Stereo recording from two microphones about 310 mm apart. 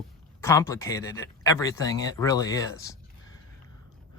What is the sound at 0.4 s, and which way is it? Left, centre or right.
Speech, centre.